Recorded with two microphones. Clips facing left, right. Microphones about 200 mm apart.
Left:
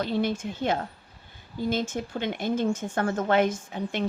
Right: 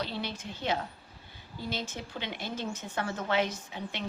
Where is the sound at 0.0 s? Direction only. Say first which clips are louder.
Left 9 dB; 50° left (ahead or behind).